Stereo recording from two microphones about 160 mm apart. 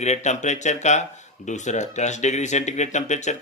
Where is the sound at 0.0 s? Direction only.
45° left (ahead or behind).